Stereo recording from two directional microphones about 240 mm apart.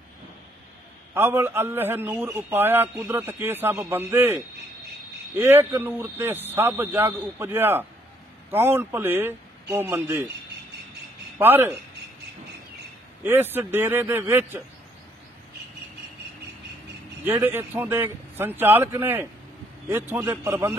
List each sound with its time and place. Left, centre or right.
1.1 s a man's voice: centre
11.3 s a man's voice: centre
13.2 s a man's voice: centre
17.2 s a man's voice: centre